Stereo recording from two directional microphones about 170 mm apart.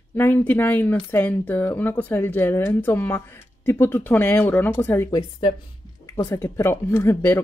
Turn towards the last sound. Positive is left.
turn(degrees=15)  # may be behind; listen again after turning